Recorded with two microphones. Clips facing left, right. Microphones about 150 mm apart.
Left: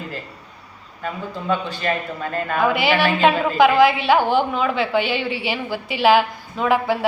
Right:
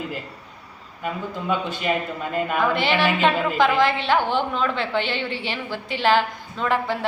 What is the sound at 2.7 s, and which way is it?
A woman's voice, 5° left (ahead or behind).